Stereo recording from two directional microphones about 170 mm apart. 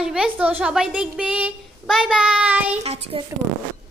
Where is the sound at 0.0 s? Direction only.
5° right (ahead or behind).